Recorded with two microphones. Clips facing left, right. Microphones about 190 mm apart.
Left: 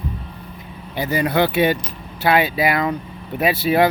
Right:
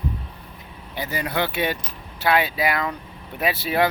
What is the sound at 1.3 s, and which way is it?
Speech, 10° left (ahead or behind).